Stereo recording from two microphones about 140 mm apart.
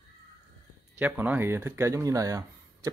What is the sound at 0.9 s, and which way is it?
Speech, 10° right (ahead or behind).